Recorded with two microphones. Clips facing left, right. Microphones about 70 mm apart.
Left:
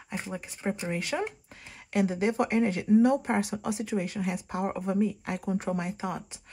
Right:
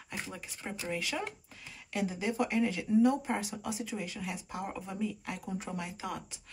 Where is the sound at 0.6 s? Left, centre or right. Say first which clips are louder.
Left 10 dB; left.